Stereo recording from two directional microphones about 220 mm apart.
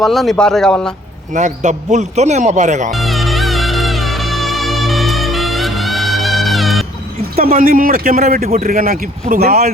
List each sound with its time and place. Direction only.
0.0 s speech: centre (ahead or behind)
1.3 s a man's voice: 35° right (ahead or behind)
2.9 s music: centre (ahead or behind)
7.4 s a man's voice: 40° right (ahead or behind)